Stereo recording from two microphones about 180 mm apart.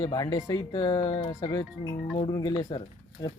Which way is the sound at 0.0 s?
25° left (ahead or behind).